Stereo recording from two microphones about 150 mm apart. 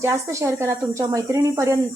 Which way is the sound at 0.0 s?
20° right (ahead or behind).